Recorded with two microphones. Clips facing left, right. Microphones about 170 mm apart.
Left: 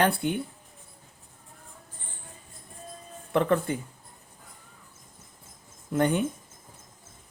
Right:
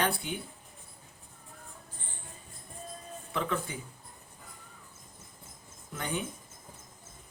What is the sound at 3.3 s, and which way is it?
Speech, 60° left (ahead or behind).